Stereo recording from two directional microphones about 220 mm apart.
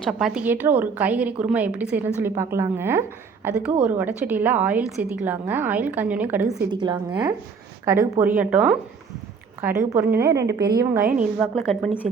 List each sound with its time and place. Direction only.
0.0 s a woman's voice: centre (ahead or behind)
6.7 s a woman's voice: 20° right (ahead or behind); by 8.8 s 5° right (ahead or behind)
9.9 s a woman's voice: 10° right (ahead or behind)
11.2 s a woman's voice: centre (ahead or behind)